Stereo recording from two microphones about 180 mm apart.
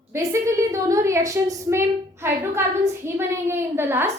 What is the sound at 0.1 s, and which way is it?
A woman's voice, 15° right (ahead or behind).